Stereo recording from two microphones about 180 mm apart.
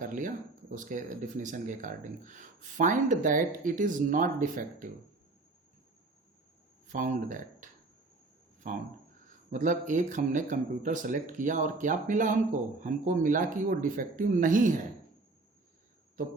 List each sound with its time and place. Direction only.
0.0 s speech: 45° right (ahead or behind)
6.8 s speech: 45° right (ahead or behind)